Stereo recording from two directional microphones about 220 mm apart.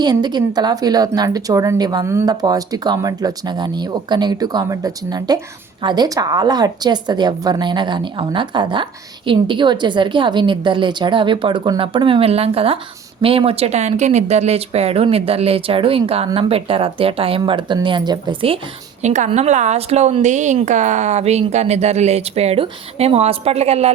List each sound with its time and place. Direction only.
0.0 s speech: 20° right (ahead or behind)